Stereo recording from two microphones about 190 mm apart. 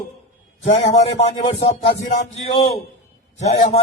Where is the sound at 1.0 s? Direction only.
35° left (ahead or behind).